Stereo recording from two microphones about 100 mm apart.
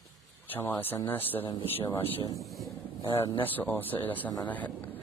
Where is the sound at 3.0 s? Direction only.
50° left (ahead or behind).